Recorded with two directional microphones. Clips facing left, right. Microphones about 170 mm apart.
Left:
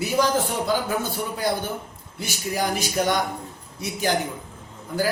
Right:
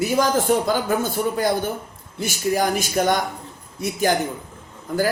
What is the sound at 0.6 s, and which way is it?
A man's voice, 50° right (ahead or behind).